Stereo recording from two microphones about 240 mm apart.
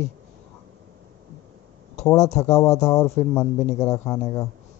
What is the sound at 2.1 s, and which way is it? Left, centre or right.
Speech, centre.